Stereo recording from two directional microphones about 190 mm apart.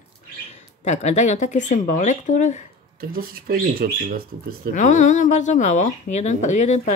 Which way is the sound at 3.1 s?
50° right (ahead or behind).